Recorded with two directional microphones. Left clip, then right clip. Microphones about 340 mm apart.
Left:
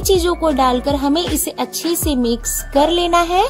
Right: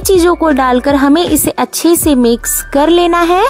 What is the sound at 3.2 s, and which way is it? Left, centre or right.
Speech, right.